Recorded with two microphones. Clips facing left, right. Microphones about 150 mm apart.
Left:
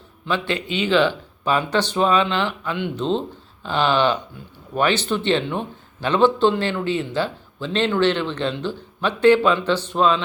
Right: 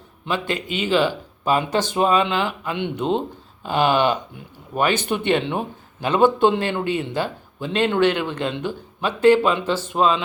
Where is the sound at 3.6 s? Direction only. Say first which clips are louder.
Right 1 dB; 45° right (ahead or behind).